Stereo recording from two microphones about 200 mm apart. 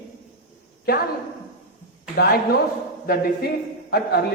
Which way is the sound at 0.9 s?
50° left (ahead or behind).